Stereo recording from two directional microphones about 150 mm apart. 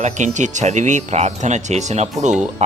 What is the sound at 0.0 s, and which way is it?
Speech, 55° right (ahead or behind).